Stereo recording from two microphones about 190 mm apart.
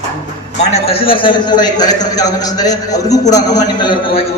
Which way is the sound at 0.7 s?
30° left (ahead or behind).